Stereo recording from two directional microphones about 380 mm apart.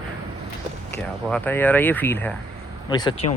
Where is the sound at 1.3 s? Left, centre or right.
Centre.